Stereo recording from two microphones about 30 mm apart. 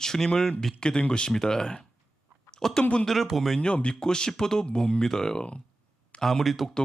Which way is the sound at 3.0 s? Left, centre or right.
Centre.